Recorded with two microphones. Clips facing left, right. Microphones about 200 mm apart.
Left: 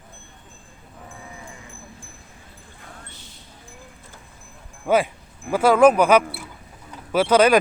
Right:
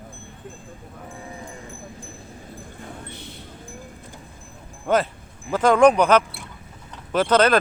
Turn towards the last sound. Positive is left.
turn(degrees=10)  # may be behind; listen again after turning